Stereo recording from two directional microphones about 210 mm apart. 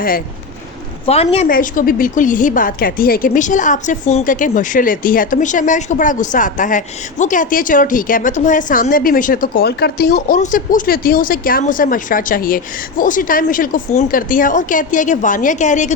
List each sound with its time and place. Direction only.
1.0 s a woman's voice: 30° left (ahead or behind)
1.5 s speech: 40° left (ahead or behind)